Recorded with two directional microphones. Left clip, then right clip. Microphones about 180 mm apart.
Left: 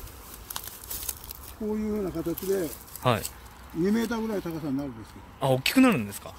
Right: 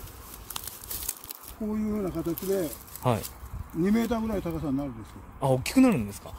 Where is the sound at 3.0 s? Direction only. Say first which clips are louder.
Left 2 dB; 10° right (ahead or behind).